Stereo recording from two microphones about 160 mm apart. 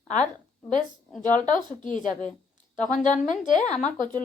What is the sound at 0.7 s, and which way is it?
A woman's voice, 55° left (ahead or behind).